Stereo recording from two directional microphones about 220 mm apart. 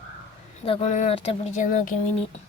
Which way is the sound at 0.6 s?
25° left (ahead or behind).